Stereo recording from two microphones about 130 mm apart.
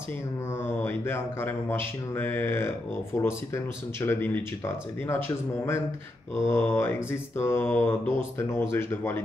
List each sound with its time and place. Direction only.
0.7 s speech: 15° left (ahead or behind)
6.4 s speech: 20° left (ahead or behind)